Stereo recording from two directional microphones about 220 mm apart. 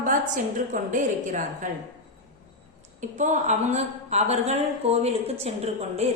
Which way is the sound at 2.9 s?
35° right (ahead or behind).